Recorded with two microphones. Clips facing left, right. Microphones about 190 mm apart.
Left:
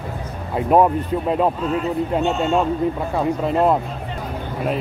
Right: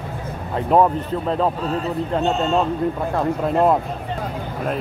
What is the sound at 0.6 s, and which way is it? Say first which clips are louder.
Speech: left 1 dB; 10° left (ahead or behind).